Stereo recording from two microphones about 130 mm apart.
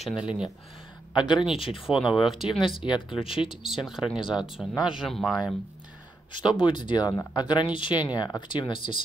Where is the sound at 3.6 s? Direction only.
5° right (ahead or behind).